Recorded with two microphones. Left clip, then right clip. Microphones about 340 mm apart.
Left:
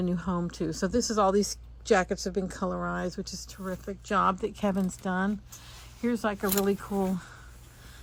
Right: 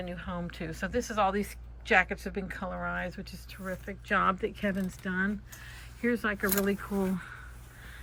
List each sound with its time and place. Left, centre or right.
0.0 s speech: centre
2.6 s speech: left
3.0 s speech: centre